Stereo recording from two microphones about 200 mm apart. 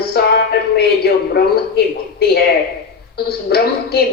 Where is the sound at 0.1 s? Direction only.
55° left (ahead or behind).